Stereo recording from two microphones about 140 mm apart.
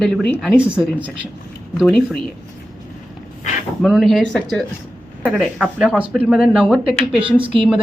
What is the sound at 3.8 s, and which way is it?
Speech, centre (ahead or behind).